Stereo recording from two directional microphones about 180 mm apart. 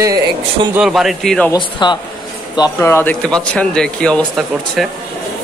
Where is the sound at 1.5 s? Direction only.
25° left (ahead or behind).